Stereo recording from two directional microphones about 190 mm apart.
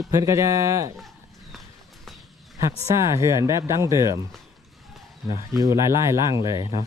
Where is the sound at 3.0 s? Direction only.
15° right (ahead or behind).